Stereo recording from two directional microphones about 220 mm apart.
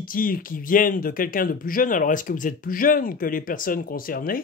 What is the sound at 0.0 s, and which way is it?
Speech, 40° left (ahead or behind).